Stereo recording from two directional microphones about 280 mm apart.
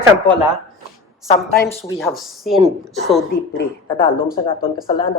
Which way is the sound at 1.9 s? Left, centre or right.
Centre.